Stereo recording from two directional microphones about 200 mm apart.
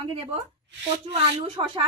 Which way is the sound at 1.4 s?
25° right (ahead or behind).